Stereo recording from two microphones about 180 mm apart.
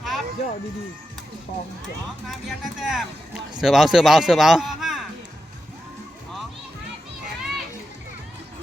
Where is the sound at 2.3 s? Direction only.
Centre (ahead or behind).